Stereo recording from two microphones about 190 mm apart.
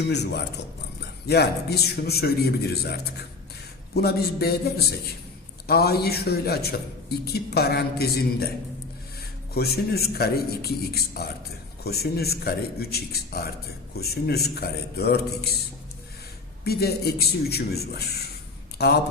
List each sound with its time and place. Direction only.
0.1 s a man's voice: 60° left (ahead or behind)
3.9 s a man's voice: 55° left (ahead or behind)
9.6 s a man's voice: 55° left (ahead or behind)
16.6 s a man's voice: 55° left (ahead or behind)